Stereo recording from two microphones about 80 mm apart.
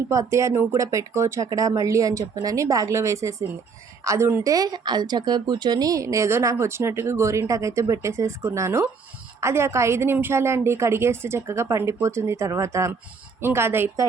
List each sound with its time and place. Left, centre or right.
0.1 s a woman's voice: right
4.5 s a woman's voice: right